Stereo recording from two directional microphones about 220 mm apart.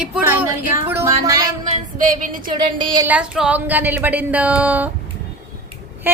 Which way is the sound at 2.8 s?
20° right (ahead or behind).